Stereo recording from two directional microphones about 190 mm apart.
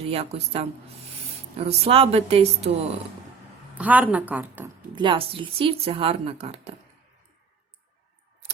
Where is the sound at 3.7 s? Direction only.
10° right (ahead or behind).